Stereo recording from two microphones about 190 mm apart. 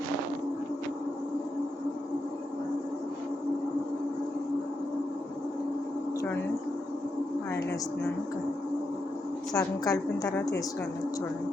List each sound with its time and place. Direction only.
9.5 s a woman's voice: 20° left (ahead or behind)